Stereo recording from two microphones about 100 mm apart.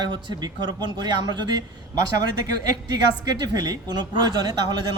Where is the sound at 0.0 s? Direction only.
50° right (ahead or behind).